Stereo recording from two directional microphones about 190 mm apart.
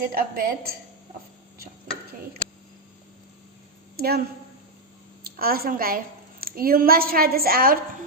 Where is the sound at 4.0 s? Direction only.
55° right (ahead or behind).